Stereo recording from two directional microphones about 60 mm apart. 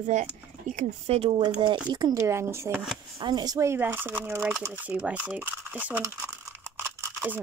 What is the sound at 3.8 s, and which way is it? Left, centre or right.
Speech, right.